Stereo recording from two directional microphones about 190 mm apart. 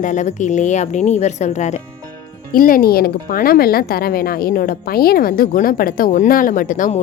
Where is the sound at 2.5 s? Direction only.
50° left (ahead or behind).